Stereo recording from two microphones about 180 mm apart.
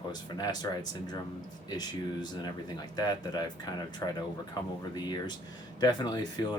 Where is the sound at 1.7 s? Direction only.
25° left (ahead or behind).